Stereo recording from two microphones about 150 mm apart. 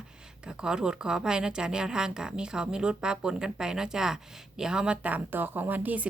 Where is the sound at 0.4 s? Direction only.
5° right (ahead or behind).